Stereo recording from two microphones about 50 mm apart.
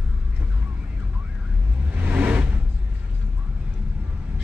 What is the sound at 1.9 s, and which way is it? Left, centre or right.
Vehicle, right.